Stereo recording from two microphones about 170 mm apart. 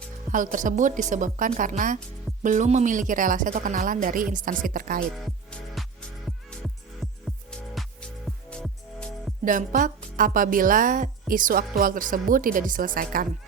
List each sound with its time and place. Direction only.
0.3 s a woman's voice: 50° right (ahead or behind)
5.1 s music: centre (ahead or behind)
9.4 s a woman's voice: 50° right (ahead or behind)